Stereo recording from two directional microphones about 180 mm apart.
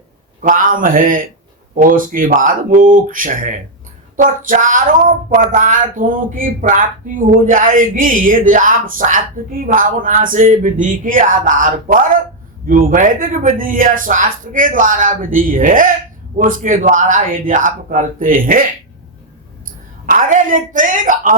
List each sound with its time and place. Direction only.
0.4 s speech: 50° right (ahead or behind)
20.1 s speech: 50° right (ahead or behind)